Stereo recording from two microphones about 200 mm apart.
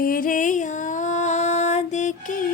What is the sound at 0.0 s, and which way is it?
Music, 45° left (ahead or behind).